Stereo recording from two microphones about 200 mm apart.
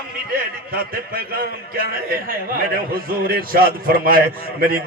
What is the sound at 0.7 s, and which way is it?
A man's voice, 45° right (ahead or behind).